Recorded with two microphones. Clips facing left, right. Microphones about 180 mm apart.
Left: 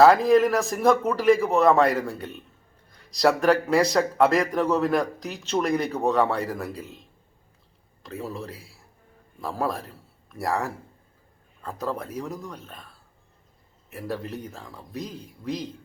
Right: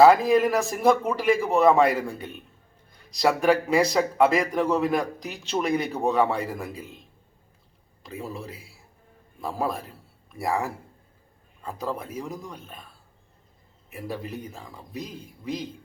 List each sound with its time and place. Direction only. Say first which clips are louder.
0.0 s speech: even; centre (ahead or behind)
8.0 s speech: left 2 dB; centre (ahead or behind)
11.6 s speech: left 1 dB; 10° right (ahead or behind)
13.9 s speech: left 2 dB; 5° right (ahead or behind)